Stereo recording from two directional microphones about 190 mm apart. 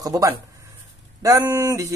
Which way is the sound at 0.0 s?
20° right (ahead or behind).